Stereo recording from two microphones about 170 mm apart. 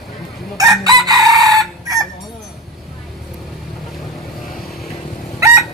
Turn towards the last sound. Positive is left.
turn(degrees=-15)  # may be behind; listen again after turning